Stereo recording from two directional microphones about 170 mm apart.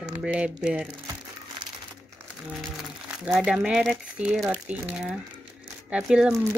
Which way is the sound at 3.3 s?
5° right (ahead or behind).